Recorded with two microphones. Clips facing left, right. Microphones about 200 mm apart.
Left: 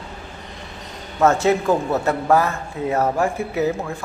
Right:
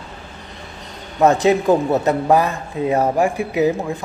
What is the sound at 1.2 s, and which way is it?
A man's voice, 15° right (ahead or behind).